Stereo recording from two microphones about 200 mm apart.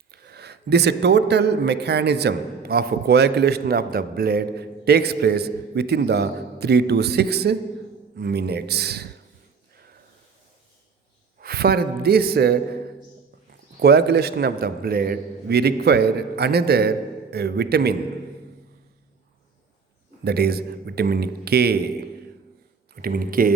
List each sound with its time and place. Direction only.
0.1 s a man's voice: 55° right (ahead or behind)
11.3 s a man's voice: 50° right (ahead or behind)
13.7 s a man's voice: 55° right (ahead or behind)
20.2 s a man's voice: 50° right (ahead or behind)
23.0 s a man's voice: 45° right (ahead or behind)